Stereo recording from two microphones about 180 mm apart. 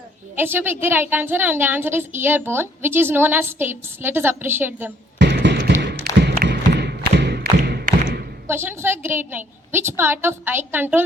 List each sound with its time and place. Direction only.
0.3 s a woman's voice: 10° right (ahead or behind)
5.1 s a sound: 75° right (ahead or behind)
7.6 s thump: 60° right (ahead or behind)
8.4 s a woman's voice: 15° right (ahead or behind)